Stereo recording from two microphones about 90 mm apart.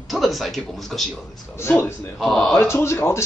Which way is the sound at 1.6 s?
30° left (ahead or behind).